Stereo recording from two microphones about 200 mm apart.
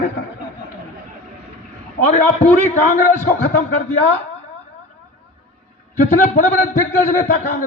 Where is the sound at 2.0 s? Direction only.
35° left (ahead or behind).